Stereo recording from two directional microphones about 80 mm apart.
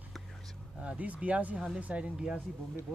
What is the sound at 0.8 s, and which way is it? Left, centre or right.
Speech, centre.